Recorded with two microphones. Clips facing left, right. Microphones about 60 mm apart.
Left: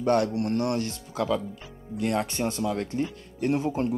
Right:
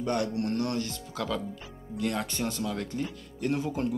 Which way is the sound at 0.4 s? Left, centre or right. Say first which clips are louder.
Left 3 dB; left.